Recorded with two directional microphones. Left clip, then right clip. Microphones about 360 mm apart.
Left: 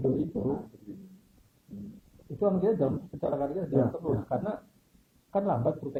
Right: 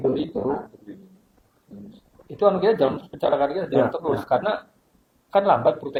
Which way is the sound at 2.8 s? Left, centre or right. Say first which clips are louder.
Right 9 dB; centre.